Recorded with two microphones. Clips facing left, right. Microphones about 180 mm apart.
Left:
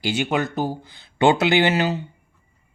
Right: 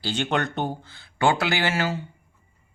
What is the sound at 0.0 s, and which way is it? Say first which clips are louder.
Speech: left 3 dB; 10° left (ahead or behind).